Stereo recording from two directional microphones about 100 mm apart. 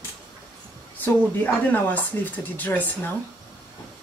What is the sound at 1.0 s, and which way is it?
Speech, 20° left (ahead or behind).